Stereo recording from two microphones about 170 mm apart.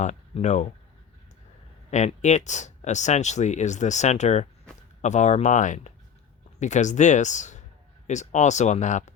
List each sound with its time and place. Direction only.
0.0 s speech: 45° left (ahead or behind)
1.9 s speech: 45° left (ahead or behind)